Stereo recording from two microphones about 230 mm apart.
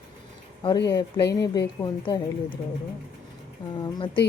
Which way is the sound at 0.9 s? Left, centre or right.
Centre.